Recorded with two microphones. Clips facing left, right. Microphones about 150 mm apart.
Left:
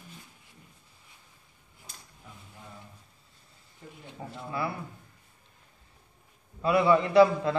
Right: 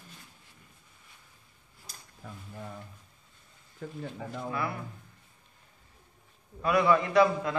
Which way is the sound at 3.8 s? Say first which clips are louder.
Right 8 dB; 90° right.